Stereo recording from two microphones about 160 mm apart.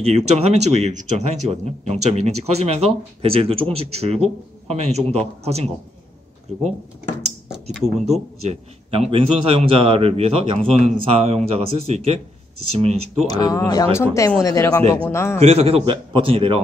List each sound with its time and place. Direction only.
0.0 s a man's voice: 40° right (ahead or behind)
7.7 s speech: centre (ahead or behind)
8.5 s a man's voice: 40° right (ahead or behind)
13.3 s speech: 25° left (ahead or behind)
15.4 s a man's voice: 40° right (ahead or behind)